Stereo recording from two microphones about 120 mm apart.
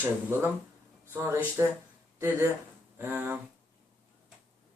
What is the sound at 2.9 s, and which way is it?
Speech, 15° right (ahead or behind).